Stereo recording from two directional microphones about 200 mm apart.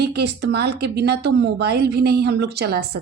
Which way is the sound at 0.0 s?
55° right (ahead or behind).